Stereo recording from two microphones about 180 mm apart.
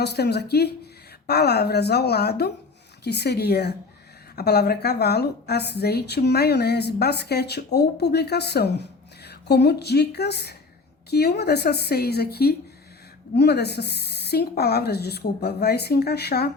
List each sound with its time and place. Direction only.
0.0 s a woman's voice: 65° left (ahead or behind)